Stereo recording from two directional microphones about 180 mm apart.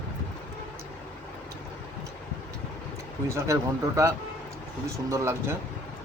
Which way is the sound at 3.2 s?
15° right (ahead or behind).